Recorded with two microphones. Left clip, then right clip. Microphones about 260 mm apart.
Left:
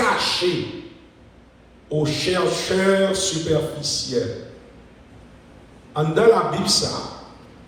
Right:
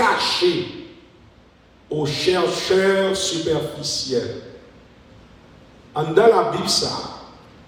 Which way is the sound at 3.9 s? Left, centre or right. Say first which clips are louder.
Even; right.